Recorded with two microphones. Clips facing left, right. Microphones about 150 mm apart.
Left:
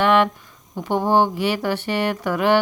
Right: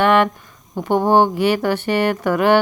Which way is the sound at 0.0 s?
50° right (ahead or behind).